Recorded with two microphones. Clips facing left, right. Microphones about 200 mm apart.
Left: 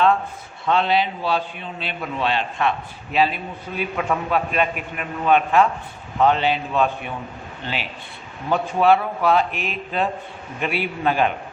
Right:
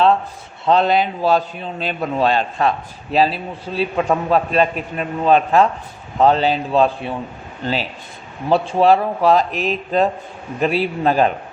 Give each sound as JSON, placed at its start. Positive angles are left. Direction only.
{"t": 0.7, "sound": "a man's voice", "side_deg": -45}